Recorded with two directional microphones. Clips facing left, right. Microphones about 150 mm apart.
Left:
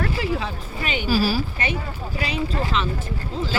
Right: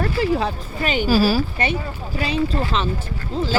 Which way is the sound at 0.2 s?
40° right (ahead or behind).